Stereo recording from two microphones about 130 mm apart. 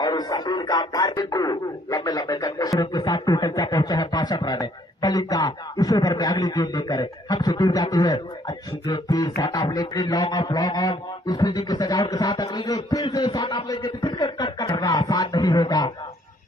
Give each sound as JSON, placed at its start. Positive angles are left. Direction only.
{"t": 0.0, "sound": "a man's voice", "side_deg": 30}